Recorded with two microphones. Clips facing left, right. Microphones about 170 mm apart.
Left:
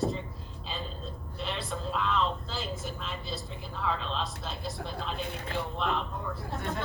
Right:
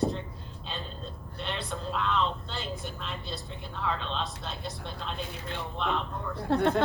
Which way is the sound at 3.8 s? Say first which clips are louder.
Even; centre (ahead or behind).